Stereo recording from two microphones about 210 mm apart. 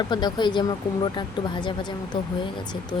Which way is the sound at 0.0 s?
20° left (ahead or behind).